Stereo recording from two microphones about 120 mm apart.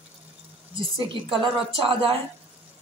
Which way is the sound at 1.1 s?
45° right (ahead or behind).